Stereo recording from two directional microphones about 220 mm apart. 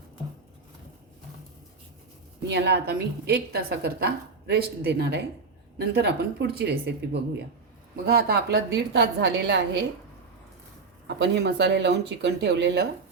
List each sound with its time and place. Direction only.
2.5 s a woman's voice: 50° right (ahead or behind)
11.2 s a woman's voice: 50° right (ahead or behind)